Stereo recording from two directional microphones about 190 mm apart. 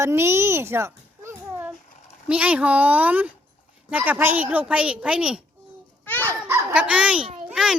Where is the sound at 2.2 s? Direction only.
5° right (ahead or behind).